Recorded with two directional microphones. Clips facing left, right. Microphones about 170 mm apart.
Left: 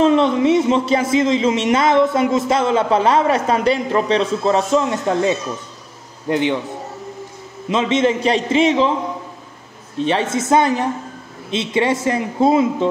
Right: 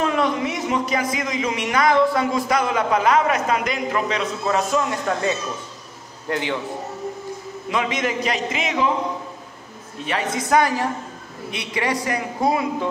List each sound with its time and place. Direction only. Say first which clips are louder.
0.0 s speech: left 7 dB; 25° left (ahead or behind)
7.7 s speech: left 7 dB; 25° left (ahead or behind)
10.0 s speech: left 6 dB; 25° left (ahead or behind)